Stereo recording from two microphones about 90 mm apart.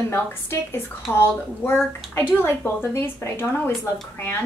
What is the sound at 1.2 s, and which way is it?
Speech, 25° left (ahead or behind).